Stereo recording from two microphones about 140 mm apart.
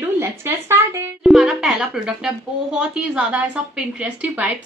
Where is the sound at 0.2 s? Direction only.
20° right (ahead or behind).